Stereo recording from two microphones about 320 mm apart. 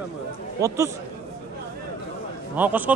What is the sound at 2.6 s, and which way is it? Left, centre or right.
Speech, centre.